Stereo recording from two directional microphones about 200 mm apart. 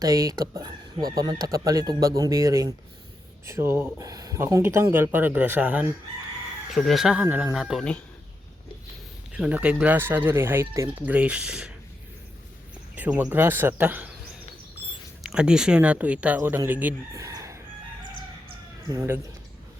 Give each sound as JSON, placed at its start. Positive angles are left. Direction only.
{"t": 0.0, "sound": "speech", "side_deg": -20}
{"t": 9.3, "sound": "speech", "side_deg": -5}
{"t": 13.0, "sound": "speech", "side_deg": -5}
{"t": 15.2, "sound": "speech", "side_deg": -5}
{"t": 18.4, "sound": "chicken", "side_deg": -15}